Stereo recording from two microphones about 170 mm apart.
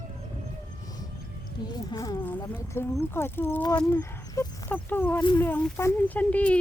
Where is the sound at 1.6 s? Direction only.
25° left (ahead or behind).